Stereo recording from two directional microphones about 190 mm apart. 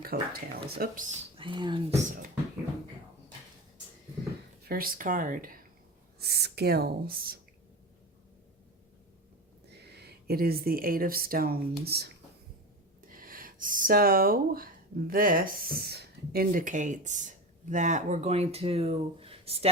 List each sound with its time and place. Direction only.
0.0 s speech: 50° right (ahead or behind)
1.4 s speech: 25° right (ahead or behind)
4.6 s speech: 50° right (ahead or behind)
9.8 s speech: 60° right (ahead or behind); by 19.6 s 30° right (ahead or behind)